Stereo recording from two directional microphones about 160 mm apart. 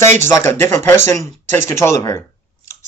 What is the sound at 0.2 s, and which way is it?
Speech, 15° left (ahead or behind).